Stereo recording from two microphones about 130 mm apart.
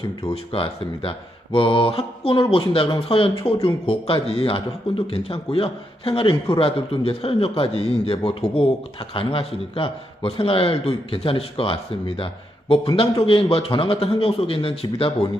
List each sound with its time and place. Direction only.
0.5 s a man's voice: 40° left (ahead or behind)